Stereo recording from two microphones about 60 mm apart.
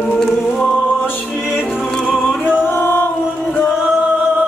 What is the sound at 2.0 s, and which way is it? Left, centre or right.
Music, centre.